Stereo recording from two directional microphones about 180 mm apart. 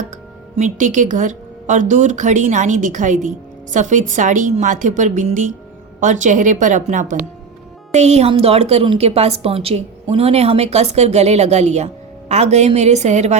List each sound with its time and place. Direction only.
0.5 s a woman's voice: 45° right (ahead or behind)